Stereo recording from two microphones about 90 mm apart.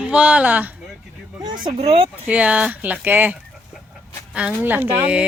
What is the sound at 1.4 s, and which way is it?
Speech, 55° right (ahead or behind).